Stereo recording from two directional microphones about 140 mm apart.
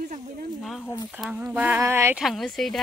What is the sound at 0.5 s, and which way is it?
Speech, centre (ahead or behind).